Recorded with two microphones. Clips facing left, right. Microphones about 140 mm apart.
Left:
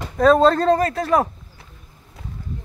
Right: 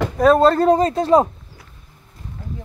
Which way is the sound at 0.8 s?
25° right (ahead or behind).